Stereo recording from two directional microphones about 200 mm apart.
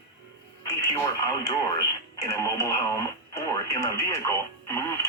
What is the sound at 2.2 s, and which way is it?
Speech, 15° left (ahead or behind).